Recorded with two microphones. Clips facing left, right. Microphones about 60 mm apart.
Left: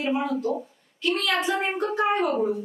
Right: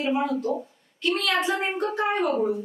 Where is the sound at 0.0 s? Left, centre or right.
Centre.